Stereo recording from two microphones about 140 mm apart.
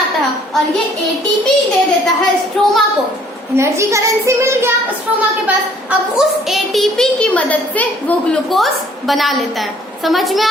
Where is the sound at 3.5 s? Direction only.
20° right (ahead or behind).